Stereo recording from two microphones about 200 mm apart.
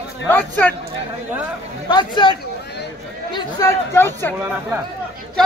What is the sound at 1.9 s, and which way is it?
Speech, 25° left (ahead or behind).